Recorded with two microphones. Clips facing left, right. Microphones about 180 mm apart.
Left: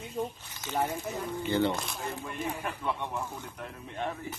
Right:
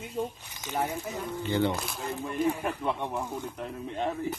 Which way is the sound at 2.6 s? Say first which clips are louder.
Right 3 dB; 20° right (ahead or behind).